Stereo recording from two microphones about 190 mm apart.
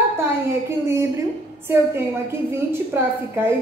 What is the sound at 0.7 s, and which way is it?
Speech, 15° right (ahead or behind).